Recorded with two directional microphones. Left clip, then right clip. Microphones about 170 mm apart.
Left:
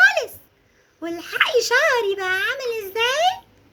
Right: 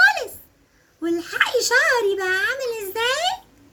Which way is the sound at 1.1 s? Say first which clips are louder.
Left 1 dB; 25° left (ahead or behind).